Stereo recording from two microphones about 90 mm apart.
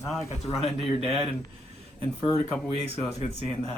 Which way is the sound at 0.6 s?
90° left.